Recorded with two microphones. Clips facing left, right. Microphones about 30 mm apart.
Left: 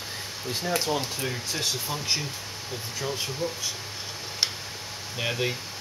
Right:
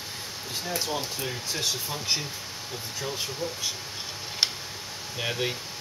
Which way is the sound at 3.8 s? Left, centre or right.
Centre.